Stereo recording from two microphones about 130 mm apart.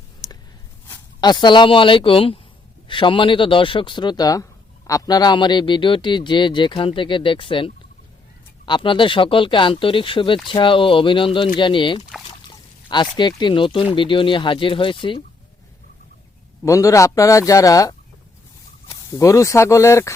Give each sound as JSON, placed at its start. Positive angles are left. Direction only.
{"t": 1.2, "sound": "speech", "side_deg": 35}
{"t": 12.3, "sound": "pour", "side_deg": 40}
{"t": 13.9, "sound": "speech", "side_deg": 40}
{"t": 16.6, "sound": "speech", "side_deg": 25}